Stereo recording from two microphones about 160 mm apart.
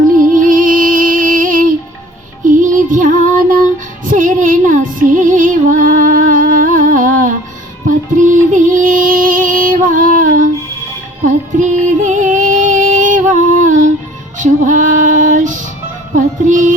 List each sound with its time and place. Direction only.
0.0 s music: 55° right (ahead or behind)